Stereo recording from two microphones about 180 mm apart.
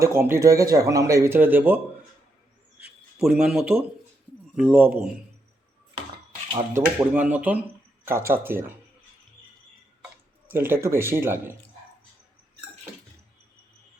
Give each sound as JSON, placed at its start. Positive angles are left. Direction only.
{"t": 0.0, "sound": "speech", "side_deg": -15}
{"t": 2.8, "sound": "speech", "side_deg": -5}
{"t": 6.7, "sound": "speech", "side_deg": -10}
{"t": 10.5, "sound": "speech", "side_deg": -15}